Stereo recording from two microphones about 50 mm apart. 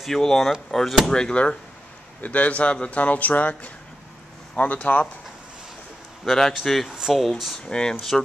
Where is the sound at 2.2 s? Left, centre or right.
Left.